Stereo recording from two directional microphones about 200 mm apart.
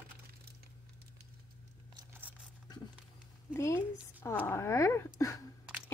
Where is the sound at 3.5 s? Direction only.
15° left (ahead or behind).